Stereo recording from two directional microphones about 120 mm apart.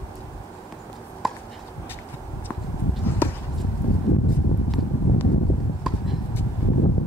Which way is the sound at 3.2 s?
20° left (ahead or behind).